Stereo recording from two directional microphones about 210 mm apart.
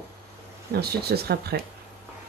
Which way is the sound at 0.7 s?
50° right (ahead or behind).